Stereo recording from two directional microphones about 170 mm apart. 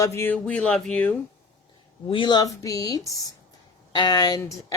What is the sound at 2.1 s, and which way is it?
Speech, 25° left (ahead or behind).